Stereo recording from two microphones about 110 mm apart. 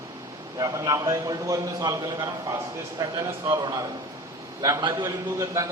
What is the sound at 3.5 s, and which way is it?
A man's voice, 40° right (ahead or behind).